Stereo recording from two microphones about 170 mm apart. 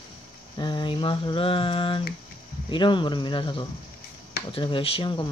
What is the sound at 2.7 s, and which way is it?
Speech, 30° left (ahead or behind).